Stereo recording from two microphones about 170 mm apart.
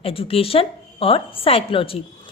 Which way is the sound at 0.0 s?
35° left (ahead or behind).